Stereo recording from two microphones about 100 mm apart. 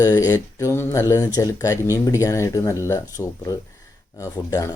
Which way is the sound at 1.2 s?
35° left (ahead or behind).